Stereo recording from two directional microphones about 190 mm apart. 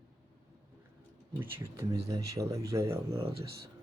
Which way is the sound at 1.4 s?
15° right (ahead or behind).